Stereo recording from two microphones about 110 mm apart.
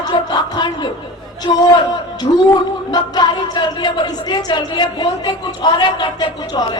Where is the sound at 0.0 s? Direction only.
40° left (ahead or behind).